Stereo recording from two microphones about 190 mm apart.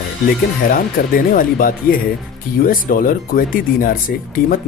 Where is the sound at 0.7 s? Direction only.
50° left (ahead or behind).